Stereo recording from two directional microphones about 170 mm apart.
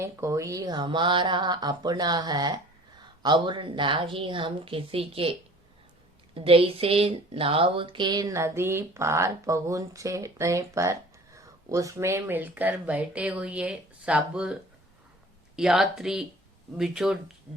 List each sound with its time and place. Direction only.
0.0 s speech: 15° right (ahead or behind); by 5.3 s 35° right (ahead or behind)
6.3 s speech: 35° right (ahead or behind); by 17.2 s 5° right (ahead or behind)